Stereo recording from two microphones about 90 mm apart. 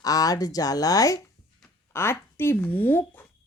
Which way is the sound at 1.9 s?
25° left (ahead or behind).